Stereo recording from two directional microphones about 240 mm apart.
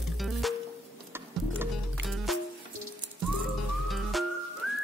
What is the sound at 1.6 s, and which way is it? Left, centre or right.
Music, centre.